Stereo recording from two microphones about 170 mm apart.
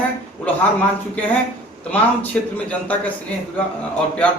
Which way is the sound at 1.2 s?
10° left (ahead or behind).